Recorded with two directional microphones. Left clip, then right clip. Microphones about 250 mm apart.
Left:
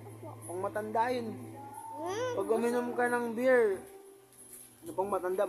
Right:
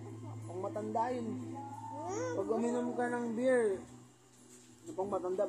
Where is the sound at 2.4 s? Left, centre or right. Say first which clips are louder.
Left 5 dB; left.